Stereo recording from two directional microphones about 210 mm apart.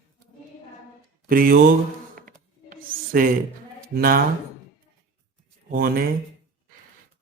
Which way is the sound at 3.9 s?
45° right (ahead or behind).